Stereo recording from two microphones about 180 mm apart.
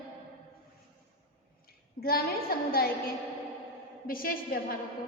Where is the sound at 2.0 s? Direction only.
55° left (ahead or behind).